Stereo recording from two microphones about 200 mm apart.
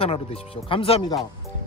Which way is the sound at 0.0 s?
30° left (ahead or behind).